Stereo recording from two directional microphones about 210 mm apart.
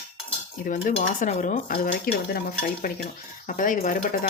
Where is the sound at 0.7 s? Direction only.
40° left (ahead or behind).